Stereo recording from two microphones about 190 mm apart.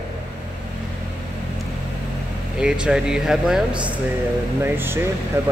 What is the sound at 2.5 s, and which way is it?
Speech, 5° right (ahead or behind).